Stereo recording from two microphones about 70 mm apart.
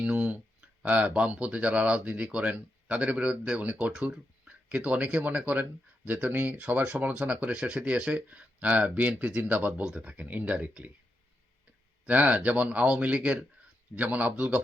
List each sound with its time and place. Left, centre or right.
0.0 s a sound: centre
0.8 s speech: centre
12.0 s speech: right